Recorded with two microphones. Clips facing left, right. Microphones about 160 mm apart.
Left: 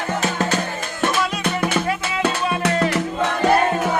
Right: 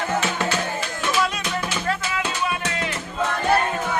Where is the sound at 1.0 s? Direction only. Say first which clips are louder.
Left 3 dB; 55° left (ahead or behind).